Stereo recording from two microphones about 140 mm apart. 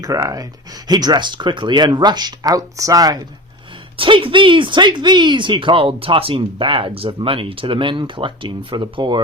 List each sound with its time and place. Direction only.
0.0 s speech: 25° right (ahead or behind)
3.9 s speech: 40° right (ahead or behind)